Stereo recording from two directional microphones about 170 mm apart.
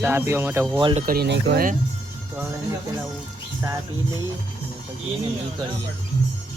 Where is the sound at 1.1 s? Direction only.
80° right.